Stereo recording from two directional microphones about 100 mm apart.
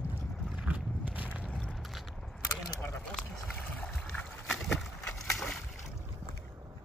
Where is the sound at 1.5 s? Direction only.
10° left (ahead or behind).